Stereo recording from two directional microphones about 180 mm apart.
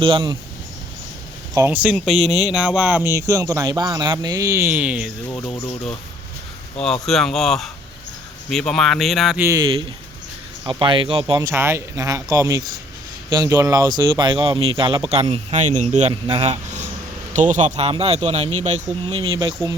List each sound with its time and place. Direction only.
0.0 s speech: 25° right (ahead or behind)
1.5 s speech: 10° right (ahead or behind)
2.3 s speech: 20° left (ahead or behind)
2.6 s speech: 5° right (ahead or behind)
7.0 s speech: centre (ahead or behind)
9.4 s speech: 15° right (ahead or behind)
10.7 s speech: 30° right (ahead or behind)
11.3 s speech: 15° right (ahead or behind); by 18.8 s 35° right (ahead or behind)
19.0 s speech: 25° right (ahead or behind)